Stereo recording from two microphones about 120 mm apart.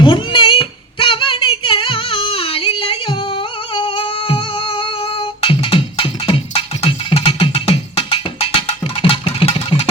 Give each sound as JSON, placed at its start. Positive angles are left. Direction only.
{"t": 0.0, "sound": "child singing", "side_deg": 45}